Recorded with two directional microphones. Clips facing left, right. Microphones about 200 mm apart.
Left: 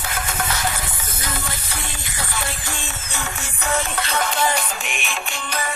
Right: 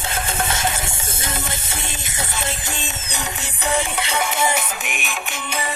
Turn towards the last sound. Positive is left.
turn(degrees=-10)  # may be behind; listen again after turning